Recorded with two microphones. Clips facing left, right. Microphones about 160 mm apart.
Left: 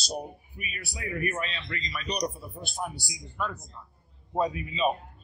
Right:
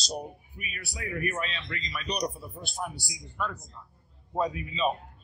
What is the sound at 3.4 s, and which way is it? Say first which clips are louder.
A man's voice: left 1 dB; 15° left (ahead or behind).